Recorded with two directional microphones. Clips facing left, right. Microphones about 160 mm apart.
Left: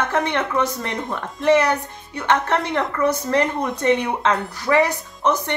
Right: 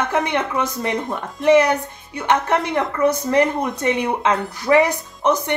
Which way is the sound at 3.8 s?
15° right (ahead or behind).